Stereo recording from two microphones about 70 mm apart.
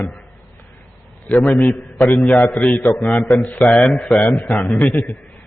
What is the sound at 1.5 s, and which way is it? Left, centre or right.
A man's voice, centre.